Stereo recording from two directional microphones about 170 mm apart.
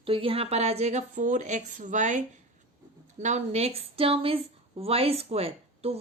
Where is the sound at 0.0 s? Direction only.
30° right (ahead or behind).